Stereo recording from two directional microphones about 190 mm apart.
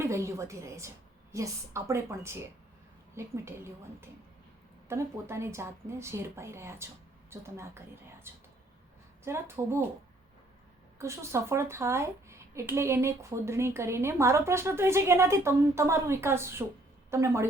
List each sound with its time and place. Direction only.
0.0 s speech: 15° right (ahead or behind)
11.0 s speech: 15° right (ahead or behind)